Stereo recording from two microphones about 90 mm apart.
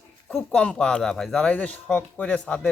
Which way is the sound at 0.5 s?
10° left (ahead or behind).